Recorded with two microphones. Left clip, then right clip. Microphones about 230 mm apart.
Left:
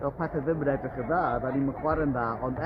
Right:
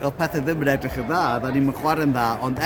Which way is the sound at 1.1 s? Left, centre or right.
Right.